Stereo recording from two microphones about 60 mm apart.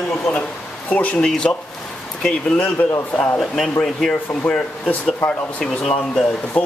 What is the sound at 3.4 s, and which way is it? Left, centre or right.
Speech, centre.